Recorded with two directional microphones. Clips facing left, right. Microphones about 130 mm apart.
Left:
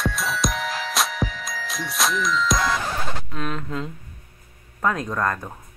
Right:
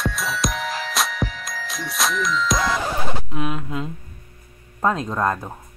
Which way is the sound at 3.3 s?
15° right (ahead or behind).